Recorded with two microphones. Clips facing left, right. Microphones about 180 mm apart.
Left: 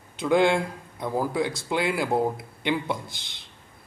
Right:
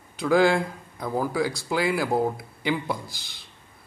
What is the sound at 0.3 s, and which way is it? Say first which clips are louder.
Speech: right 1 dB; centre (ahead or behind).